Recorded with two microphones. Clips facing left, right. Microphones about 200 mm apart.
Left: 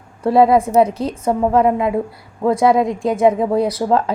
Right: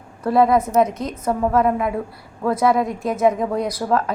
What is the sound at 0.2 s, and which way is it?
A woman's voice, 25° left (ahead or behind).